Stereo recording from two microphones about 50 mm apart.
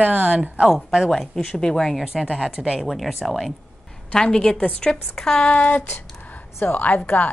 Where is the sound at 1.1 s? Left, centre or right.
Centre.